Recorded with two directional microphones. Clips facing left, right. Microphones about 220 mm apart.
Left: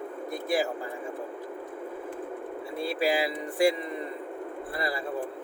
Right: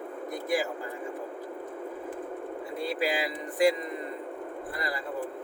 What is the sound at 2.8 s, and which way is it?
Speech, 25° left (ahead or behind).